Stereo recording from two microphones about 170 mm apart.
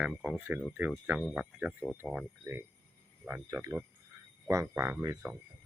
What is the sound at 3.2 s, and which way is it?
Speech, 15° right (ahead or behind).